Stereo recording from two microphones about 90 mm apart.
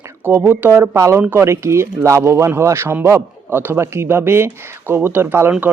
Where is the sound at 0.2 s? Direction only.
25° right (ahead or behind).